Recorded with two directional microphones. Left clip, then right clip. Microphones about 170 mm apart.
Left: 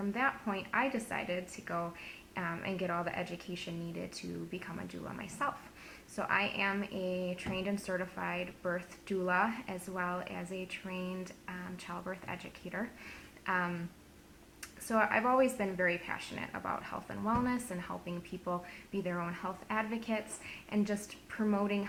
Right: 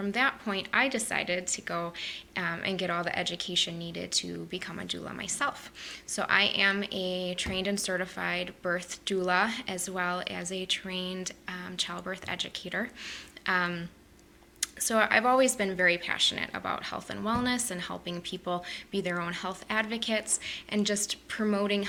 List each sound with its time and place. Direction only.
0.0 s speech: 20° right (ahead or behind)
14.8 s speech: 20° right (ahead or behind)